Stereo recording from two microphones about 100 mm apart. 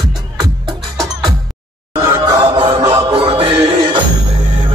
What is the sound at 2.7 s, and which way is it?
Music, 60° right (ahead or behind).